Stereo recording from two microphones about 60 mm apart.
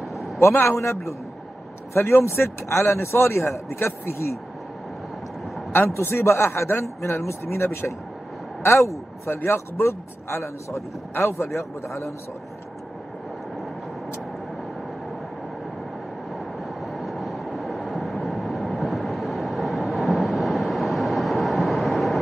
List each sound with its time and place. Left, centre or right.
0.1 s a sound: centre
0.6 s a man's voice: left
2.0 s a man's voice: left
5.9 s a man's voice: left
16.3 s vehicle: centre